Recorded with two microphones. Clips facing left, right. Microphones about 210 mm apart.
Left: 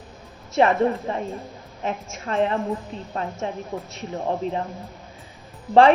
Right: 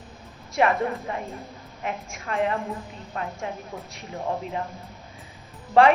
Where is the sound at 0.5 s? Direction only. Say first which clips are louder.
Left 4 dB; 30° left (ahead or behind).